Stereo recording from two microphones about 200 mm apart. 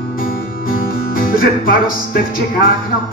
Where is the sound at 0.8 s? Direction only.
45° left (ahead or behind).